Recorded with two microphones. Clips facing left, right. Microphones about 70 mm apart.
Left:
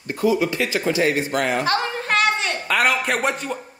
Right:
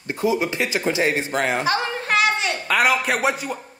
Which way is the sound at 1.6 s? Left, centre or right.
Centre.